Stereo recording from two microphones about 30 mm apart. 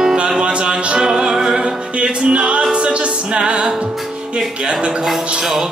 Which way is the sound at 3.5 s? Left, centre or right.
Right.